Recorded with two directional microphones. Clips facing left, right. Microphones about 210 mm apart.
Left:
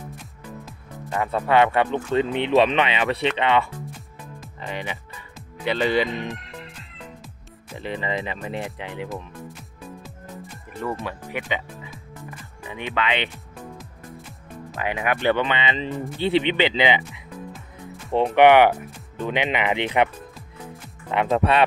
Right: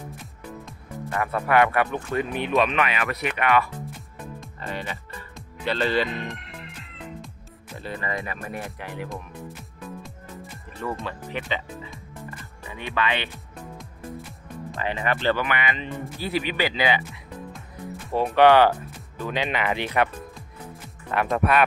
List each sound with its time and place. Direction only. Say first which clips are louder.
1.1 s speech: left 2 dB; 20° left (ahead or behind)
4.6 s music: left 2 dB; 15° left (ahead or behind)
7.7 s speech: left 3 dB; 20° left (ahead or behind)
9.1 s music: left 2 dB; centre (ahead or behind)
12.6 s speech: left 1 dB; 20° left (ahead or behind)
14.7 s speech: left 2 dB; 10° left (ahead or behind)
21.1 s speech: left 2 dB; 25° left (ahead or behind)